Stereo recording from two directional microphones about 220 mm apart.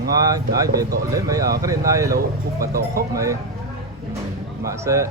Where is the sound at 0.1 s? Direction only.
15° right (ahead or behind).